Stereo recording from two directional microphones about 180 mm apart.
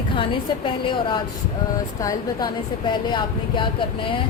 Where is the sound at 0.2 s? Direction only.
30° left (ahead or behind).